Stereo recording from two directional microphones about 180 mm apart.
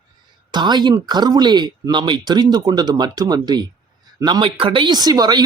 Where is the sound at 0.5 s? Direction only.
25° right (ahead or behind).